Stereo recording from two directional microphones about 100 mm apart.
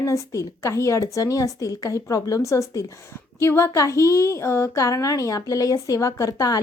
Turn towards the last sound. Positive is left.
turn(degrees=35)  # may be behind; listen again after turning